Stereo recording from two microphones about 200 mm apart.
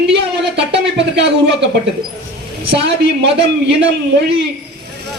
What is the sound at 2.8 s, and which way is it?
Speech, 60° right (ahead or behind).